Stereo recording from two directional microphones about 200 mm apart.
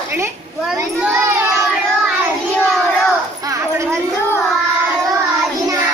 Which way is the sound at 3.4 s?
15° right (ahead or behind).